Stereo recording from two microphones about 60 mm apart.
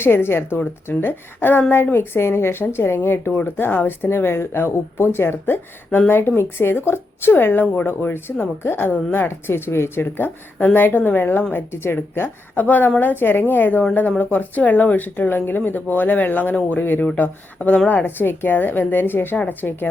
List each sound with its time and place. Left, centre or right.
0.0 s speech: left